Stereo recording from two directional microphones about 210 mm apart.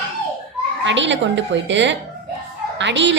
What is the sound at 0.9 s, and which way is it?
A woman's voice, 60° right (ahead or behind).